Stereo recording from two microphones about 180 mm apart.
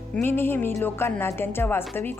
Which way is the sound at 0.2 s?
10° left (ahead or behind).